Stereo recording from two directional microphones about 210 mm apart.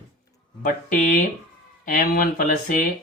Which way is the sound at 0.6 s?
40° left (ahead or behind).